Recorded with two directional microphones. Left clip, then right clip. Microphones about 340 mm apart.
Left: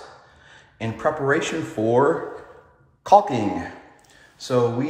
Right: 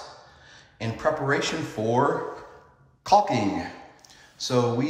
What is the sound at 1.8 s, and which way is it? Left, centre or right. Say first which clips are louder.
Speech: left 5 dB; right.